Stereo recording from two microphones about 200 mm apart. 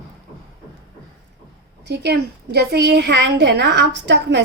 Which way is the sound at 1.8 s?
55° right (ahead or behind).